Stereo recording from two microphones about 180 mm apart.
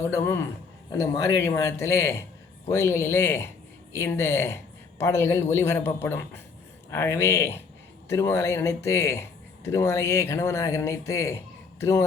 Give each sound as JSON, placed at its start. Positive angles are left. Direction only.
{"t": 0.2, "sound": "a man's voice", "side_deg": 15}